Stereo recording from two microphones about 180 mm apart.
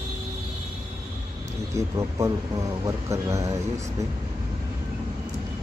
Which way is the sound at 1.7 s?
15° right (ahead or behind).